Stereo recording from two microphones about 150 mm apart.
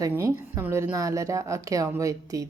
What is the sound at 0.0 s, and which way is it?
A woman's voice, 20° right (ahead or behind).